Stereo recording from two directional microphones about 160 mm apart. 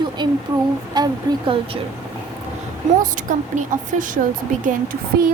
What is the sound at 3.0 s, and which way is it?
A woman's voice, 55° right (ahead or behind).